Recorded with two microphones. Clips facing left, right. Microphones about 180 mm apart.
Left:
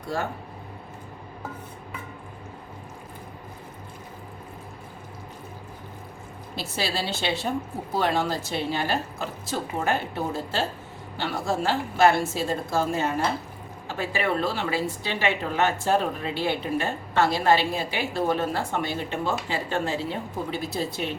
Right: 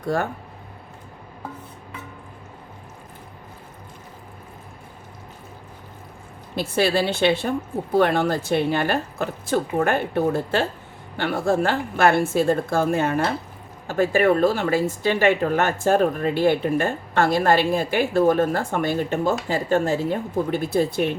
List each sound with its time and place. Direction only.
6.6 s a woman's voice: 55° right (ahead or behind)